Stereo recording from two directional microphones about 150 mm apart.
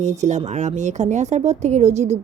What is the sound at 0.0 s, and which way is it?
Speech, 50° right (ahead or behind).